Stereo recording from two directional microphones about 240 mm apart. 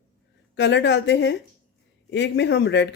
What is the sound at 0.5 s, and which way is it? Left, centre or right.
Speech, left.